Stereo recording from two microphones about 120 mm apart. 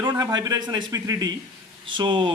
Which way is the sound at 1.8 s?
40° right (ahead or behind).